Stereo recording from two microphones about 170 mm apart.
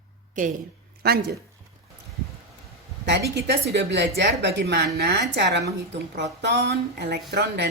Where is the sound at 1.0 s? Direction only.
70° right (ahead or behind).